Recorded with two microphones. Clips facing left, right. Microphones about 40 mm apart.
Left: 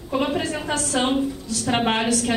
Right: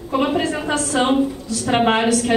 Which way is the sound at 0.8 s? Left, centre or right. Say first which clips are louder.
Right 4 dB; centre.